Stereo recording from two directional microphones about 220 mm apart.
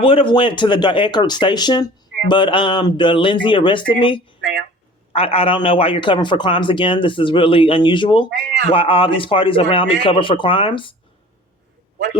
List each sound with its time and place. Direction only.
0.0 s a man's voice: 25° left (ahead or behind)